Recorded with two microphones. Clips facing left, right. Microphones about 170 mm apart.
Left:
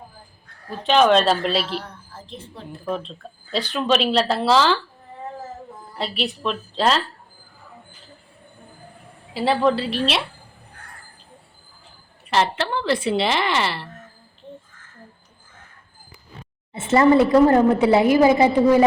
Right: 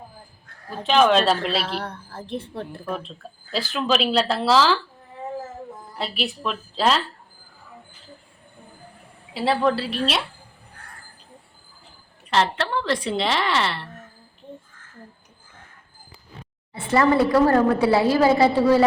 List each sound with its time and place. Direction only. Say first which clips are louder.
0.7 s speech: left 2 dB; centre (ahead or behind)
1.6 s a woman's voice: right 1 dB; 60° right (ahead or behind)
2.9 s speech: left 6 dB; 5° right (ahead or behind)
6.0 s speech: left 2 dB; centre (ahead or behind)
9.3 s speech: left 2 dB; centre (ahead or behind)
12.3 s speech: left 1 dB; centre (ahead or behind)
16.7 s a woman's voice: left 4 dB; 25° left (ahead or behind)